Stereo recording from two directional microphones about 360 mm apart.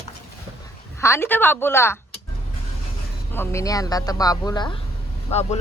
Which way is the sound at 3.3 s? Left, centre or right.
Centre.